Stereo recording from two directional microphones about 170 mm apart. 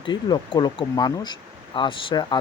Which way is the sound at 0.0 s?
25° left (ahead or behind).